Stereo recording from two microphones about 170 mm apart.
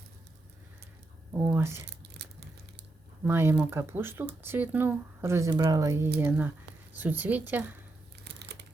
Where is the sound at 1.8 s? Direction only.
85° right.